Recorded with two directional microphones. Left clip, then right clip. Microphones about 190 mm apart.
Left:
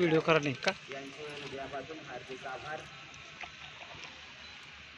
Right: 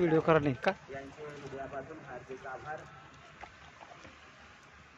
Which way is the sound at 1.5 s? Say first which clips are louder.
Right 2 dB; 30° right (ahead or behind).